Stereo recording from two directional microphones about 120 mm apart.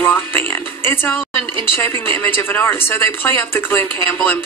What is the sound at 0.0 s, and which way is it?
Speech, 20° left (ahead or behind).